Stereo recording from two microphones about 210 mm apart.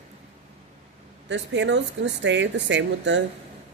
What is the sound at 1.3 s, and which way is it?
Speech, 60° right (ahead or behind).